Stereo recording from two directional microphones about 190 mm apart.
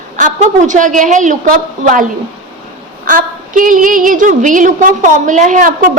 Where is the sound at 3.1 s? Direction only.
45° right (ahead or behind).